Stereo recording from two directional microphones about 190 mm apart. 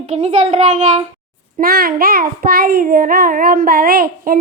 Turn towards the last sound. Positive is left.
turn(degrees=-50)  # may be behind; listen again after turning